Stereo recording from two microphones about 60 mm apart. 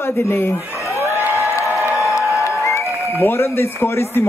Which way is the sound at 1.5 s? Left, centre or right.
Left.